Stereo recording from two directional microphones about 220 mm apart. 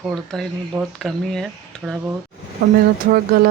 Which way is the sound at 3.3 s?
40° right (ahead or behind).